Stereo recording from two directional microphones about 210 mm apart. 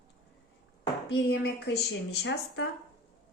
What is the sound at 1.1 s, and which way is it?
A woman's voice, 55° left (ahead or behind).